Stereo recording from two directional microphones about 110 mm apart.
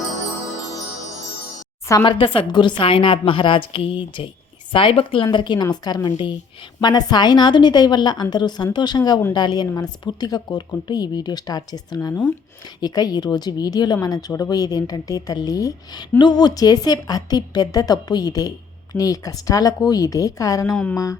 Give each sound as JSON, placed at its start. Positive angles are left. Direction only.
{"t": 2.0, "sound": "a woman's voice", "side_deg": 50}